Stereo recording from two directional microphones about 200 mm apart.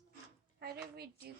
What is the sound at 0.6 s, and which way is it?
Speech, 50° right (ahead or behind).